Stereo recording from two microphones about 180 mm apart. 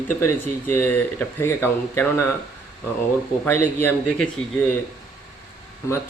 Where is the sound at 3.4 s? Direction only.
10° left (ahead or behind).